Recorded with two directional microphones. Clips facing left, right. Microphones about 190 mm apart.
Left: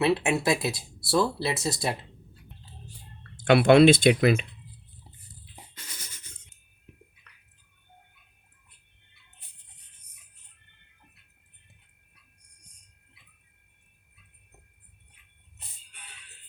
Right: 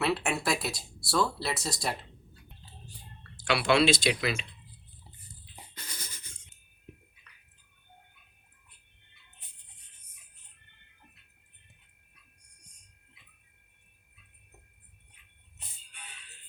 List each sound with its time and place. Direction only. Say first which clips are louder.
0.0 s speech: left 5 dB; 25° left (ahead or behind)
3.4 s speech: left 8 dB; 55° left (ahead or behind)
5.7 s music: right 4 dB; 35° right (ahead or behind)